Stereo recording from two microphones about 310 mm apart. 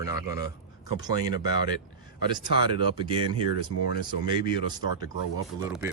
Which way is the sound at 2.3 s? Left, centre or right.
Centre.